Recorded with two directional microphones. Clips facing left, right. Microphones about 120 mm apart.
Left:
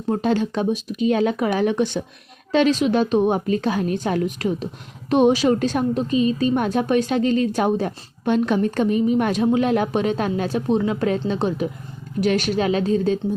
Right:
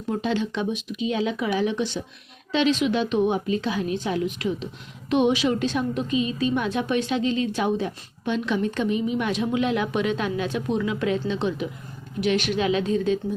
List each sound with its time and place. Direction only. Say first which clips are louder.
0.1 s a woman's voice: left 5 dB; 45° left (ahead or behind)